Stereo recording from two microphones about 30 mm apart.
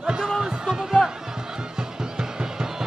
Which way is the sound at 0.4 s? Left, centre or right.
Right.